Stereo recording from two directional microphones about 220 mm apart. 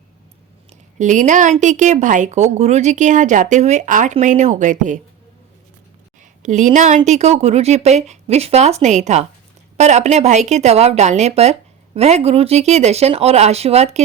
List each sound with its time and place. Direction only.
0.7 s a woman's voice: 35° right (ahead or behind)
6.4 s a woman's voice: 35° right (ahead or behind)